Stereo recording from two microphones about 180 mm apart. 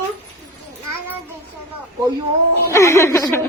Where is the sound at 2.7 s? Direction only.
15° left (ahead or behind).